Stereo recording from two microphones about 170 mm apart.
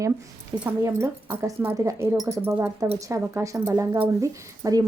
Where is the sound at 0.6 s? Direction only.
15° right (ahead or behind).